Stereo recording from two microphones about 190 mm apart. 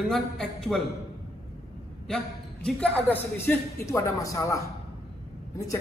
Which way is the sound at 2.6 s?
5° left (ahead or behind).